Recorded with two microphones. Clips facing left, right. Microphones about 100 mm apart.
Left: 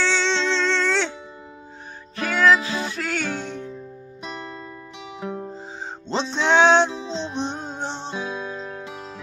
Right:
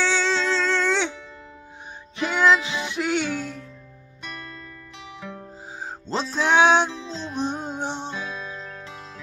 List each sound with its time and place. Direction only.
0.0 s music: 10° right (ahead or behind)
2.1 s music: 20° right (ahead or behind); by 3.7 s 5° right (ahead or behind)
4.2 s music: 25° left (ahead or behind)
6.3 s music: 10° right (ahead or behind)
6.9 s music: 25° left (ahead or behind)
7.3 s music: 10° right (ahead or behind)
8.1 s guitar: 20° left (ahead or behind)